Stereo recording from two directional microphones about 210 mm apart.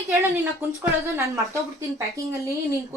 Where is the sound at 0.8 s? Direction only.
15° right (ahead or behind).